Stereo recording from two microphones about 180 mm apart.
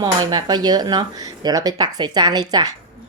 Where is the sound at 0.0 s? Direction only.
25° right (ahead or behind).